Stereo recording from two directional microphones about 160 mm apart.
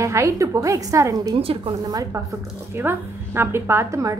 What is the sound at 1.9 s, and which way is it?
A woman's voice, 20° right (ahead or behind).